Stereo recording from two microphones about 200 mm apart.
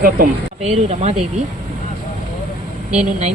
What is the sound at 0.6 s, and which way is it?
Speech, 35° right (ahead or behind).